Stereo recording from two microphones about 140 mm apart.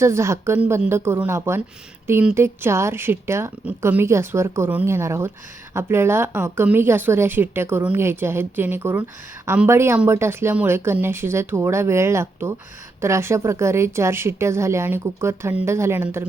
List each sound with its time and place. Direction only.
0.0 s a woman's voice: 20° right (ahead or behind)